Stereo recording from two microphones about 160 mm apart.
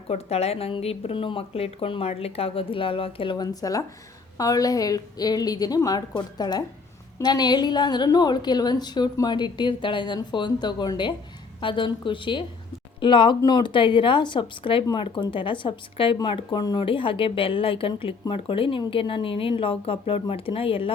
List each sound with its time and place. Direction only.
0.1 s a woman's voice: 40° left (ahead or behind)